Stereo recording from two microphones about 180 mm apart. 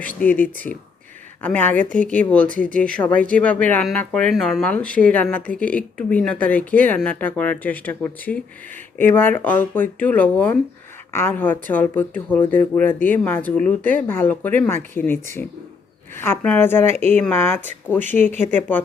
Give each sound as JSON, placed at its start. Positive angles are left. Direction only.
{"t": 0.0, "sound": "speech", "side_deg": 10}
{"t": 16.9, "sound": "speech", "side_deg": -35}
{"t": 17.2, "sound": "speech", "side_deg": 10}